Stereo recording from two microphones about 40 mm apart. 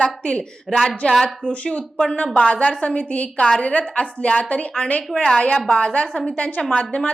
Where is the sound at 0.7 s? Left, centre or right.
Centre.